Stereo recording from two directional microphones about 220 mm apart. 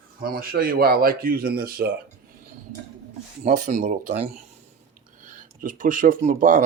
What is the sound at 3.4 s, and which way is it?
Speech, 35° right (ahead or behind).